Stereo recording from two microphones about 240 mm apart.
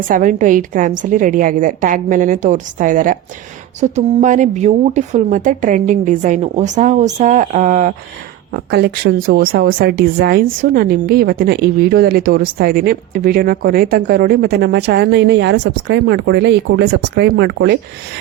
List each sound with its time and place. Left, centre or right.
0.1 s a woman's voice: right
8.5 s a woman's voice: right